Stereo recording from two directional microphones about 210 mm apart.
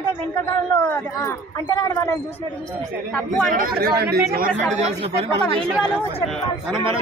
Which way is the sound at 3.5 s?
40° right (ahead or behind).